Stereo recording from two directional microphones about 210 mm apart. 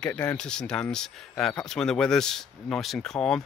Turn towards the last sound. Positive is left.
turn(degrees=5)  # may be behind; listen again after turning